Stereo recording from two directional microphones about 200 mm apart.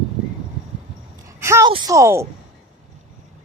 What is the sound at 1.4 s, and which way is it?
Speech, 15° right (ahead or behind).